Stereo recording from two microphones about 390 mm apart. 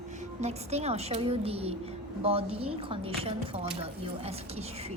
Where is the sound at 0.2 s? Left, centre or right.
Centre.